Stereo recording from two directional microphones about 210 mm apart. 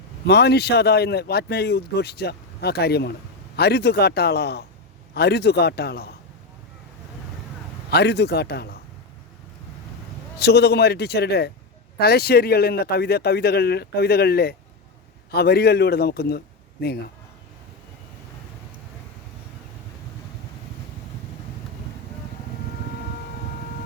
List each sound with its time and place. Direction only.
0.3 s a man's voice: 50° left (ahead or behind)
7.9 s a man's voice: 50° left (ahead or behind)
10.3 s a man's voice: 50° left (ahead or behind)